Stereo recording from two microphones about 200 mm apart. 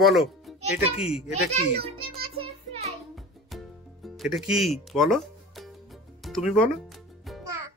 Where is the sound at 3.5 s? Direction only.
Centre (ahead or behind).